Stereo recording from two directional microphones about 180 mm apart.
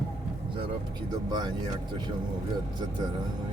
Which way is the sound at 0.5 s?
25° right (ahead or behind).